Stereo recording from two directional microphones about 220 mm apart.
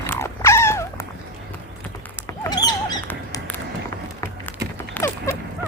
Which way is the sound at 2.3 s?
20° left (ahead or behind).